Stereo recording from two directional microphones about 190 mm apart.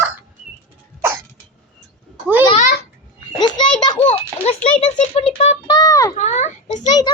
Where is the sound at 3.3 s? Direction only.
20° left (ahead or behind).